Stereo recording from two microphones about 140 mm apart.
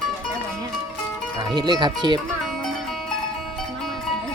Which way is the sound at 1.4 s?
30° right (ahead or behind).